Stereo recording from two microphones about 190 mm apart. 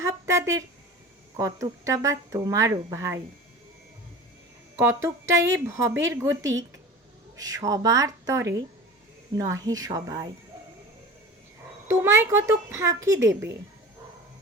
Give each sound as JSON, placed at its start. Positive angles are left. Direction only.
{"t": 0.0, "sound": "speech", "side_deg": -15}
{"t": 4.8, "sound": "speech", "side_deg": -15}
{"t": 11.9, "sound": "speech", "side_deg": -10}